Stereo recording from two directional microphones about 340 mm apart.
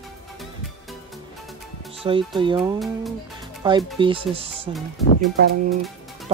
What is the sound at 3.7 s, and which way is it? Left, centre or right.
Speech, centre.